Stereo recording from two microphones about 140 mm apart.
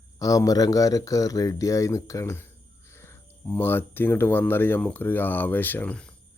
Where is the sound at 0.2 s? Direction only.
25° left (ahead or behind); by 6.1 s 10° left (ahead or behind).